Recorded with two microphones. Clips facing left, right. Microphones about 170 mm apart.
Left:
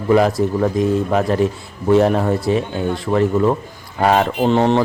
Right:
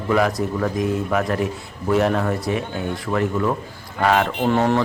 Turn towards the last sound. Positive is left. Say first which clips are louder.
# left 4 dB
turn(degrees=25)  # may be behind; listen again after turning